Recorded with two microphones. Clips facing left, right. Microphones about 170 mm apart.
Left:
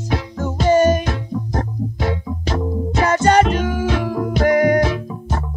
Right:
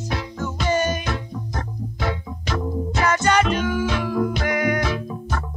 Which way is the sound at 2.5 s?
30° left (ahead or behind).